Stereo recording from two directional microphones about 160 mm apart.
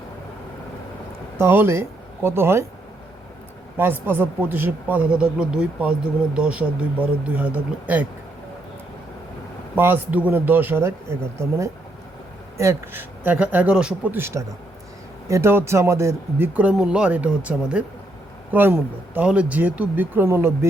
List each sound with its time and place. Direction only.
1.4 s speech: 15° right (ahead or behind)
3.8 s speech: 15° right (ahead or behind)
9.7 s speech: 10° right (ahead or behind)